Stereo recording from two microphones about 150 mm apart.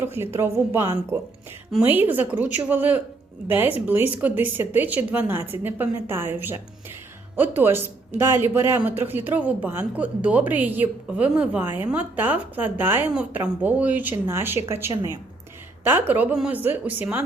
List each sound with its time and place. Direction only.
0.0 s speech: 15° right (ahead or behind)